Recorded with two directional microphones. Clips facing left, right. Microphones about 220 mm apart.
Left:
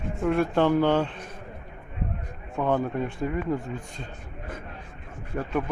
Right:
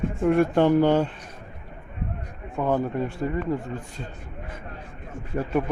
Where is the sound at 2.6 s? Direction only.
5° right (ahead or behind).